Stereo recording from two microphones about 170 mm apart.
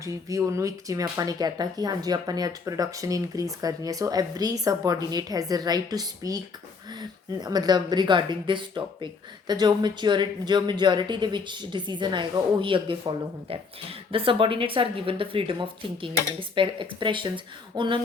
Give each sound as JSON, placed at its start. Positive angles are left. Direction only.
{"t": 0.0, "sound": "speech", "side_deg": -20}